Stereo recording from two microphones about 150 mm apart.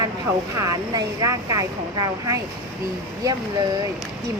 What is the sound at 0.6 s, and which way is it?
Speech, 20° right (ahead or behind).